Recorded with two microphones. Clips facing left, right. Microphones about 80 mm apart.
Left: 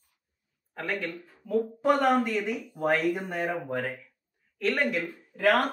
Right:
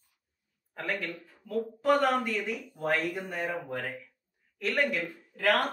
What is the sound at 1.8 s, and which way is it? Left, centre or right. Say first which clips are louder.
Speech: left 1 dB; centre.